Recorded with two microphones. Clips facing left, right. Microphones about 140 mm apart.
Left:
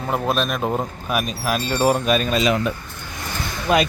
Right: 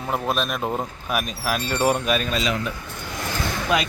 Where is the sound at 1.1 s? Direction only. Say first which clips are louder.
Left 2 dB; centre (ahead or behind).